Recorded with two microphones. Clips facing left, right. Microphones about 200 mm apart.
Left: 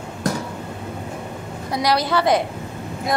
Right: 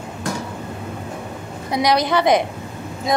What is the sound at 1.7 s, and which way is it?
Speech, 20° right (ahead or behind).